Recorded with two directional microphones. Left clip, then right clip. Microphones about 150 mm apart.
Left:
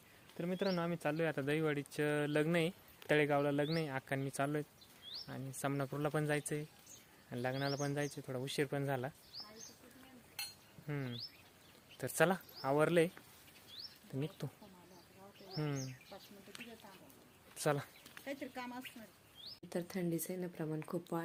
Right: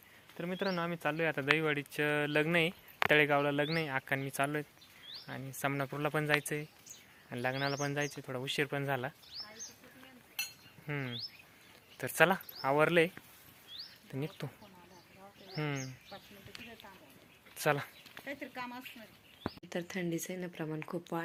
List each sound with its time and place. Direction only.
0.3 s speech: centre (ahead or behind)
5.2 s speech: 5° right (ahead or behind)
10.8 s speech: 15° right (ahead or behind)
14.4 s speech: 10° right (ahead or behind)
17.6 s a sound: 5° right (ahead or behind)
18.3 s speech: 20° left (ahead or behind)
19.7 s speech: 5° left (ahead or behind)